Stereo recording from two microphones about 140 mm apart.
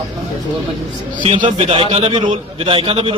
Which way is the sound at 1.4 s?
40° right (ahead or behind).